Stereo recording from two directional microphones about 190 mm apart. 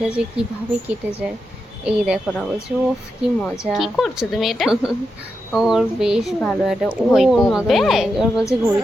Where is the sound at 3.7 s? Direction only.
Centre (ahead or behind).